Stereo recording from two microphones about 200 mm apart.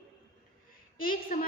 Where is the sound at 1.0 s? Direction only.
45° left (ahead or behind).